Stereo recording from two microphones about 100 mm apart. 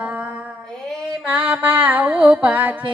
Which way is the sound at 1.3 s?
15° right (ahead or behind).